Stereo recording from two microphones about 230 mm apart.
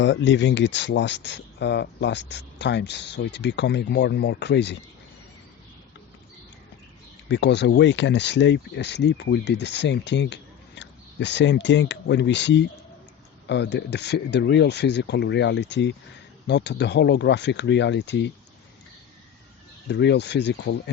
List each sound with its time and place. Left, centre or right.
0.0 s speech: left
7.3 s speech: left
19.9 s speech: left